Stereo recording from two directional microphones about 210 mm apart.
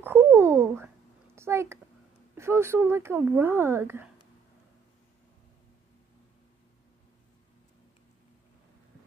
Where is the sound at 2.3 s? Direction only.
10° right (ahead or behind).